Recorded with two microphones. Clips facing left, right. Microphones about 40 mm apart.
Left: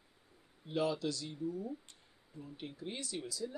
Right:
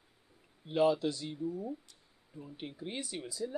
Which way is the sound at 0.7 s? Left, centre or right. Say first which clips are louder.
Right 6 dB; right.